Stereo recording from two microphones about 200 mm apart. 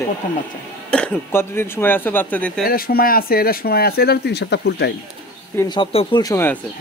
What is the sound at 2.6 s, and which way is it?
Speech, 45° left (ahead or behind).